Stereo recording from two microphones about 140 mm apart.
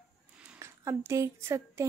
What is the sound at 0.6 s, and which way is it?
A woman's voice, 20° right (ahead or behind).